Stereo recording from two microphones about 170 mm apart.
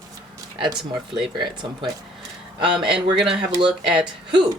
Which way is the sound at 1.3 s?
25° right (ahead or behind).